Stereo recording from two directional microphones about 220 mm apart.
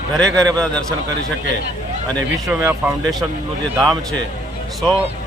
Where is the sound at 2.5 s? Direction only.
5° right (ahead or behind).